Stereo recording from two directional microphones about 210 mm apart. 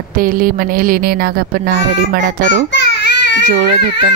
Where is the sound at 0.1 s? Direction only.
40° right (ahead or behind).